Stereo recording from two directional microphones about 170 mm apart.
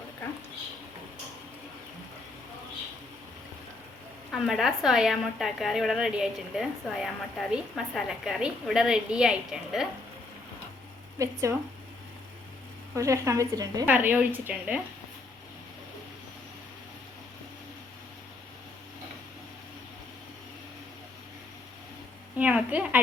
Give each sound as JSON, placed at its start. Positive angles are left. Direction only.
{"t": 4.3, "sound": "a woman's voice", "side_deg": 0}
{"t": 11.2, "sound": "a woman's voice", "side_deg": -20}
{"t": 13.0, "sound": "a woman's voice", "side_deg": -20}
{"t": 13.8, "sound": "a woman's voice", "side_deg": -10}
{"t": 22.4, "sound": "a woman's voice", "side_deg": -10}